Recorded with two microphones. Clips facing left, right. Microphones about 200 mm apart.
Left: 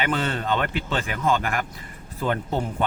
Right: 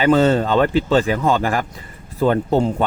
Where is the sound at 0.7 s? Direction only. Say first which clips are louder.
Right 11 dB; 35° right (ahead or behind).